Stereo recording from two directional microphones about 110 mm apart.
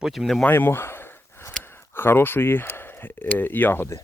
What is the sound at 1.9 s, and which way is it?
Speech, 20° left (ahead or behind).